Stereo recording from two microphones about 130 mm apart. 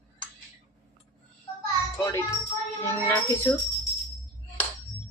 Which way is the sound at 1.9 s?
20° left (ahead or behind).